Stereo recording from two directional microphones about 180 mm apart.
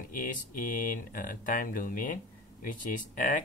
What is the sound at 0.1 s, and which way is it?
Speech, 50° left (ahead or behind).